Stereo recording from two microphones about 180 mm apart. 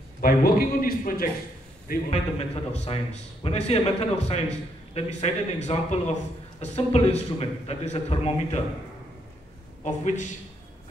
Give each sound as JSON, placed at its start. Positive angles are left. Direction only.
{"t": 0.2, "sound": "a man's voice", "side_deg": 55}
{"t": 2.0, "sound": "a man's voice", "side_deg": 35}
{"t": 9.8, "sound": "a man's voice", "side_deg": 40}